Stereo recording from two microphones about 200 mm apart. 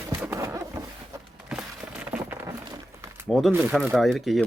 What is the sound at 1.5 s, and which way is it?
Crumpling, 5° right (ahead or behind).